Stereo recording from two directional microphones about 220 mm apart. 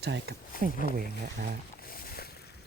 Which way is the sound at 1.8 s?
40° left (ahead or behind).